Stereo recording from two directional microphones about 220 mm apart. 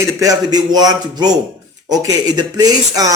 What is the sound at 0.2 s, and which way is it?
Speech, 15° right (ahead or behind).